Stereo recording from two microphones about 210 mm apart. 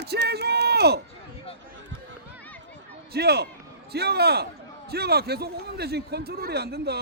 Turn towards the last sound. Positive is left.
turn(degrees=-50)  # may be behind; listen again after turning